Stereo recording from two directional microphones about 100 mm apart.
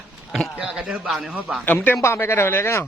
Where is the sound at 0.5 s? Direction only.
10° right (ahead or behind).